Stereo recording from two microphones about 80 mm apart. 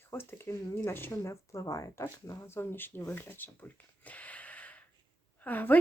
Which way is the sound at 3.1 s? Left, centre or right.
Left.